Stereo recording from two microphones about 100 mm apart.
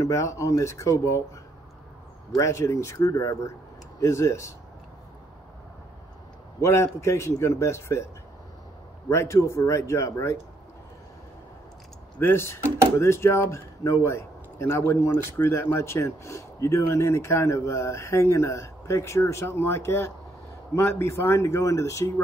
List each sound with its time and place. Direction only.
0.0 s speech: 30° left (ahead or behind)
2.3 s speech: 30° left (ahead or behind)
6.6 s speech: 30° left (ahead or behind)
9.1 s speech: 30° left (ahead or behind)
12.2 s a man's voice: 25° left (ahead or behind)